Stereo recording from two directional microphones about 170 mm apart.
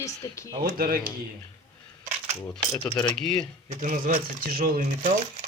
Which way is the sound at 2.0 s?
40° right (ahead or behind).